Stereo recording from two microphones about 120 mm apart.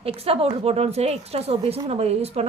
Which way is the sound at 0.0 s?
55° right (ahead or behind).